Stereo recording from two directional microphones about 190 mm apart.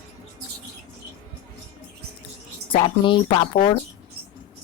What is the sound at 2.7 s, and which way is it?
Speech, 25° left (ahead or behind).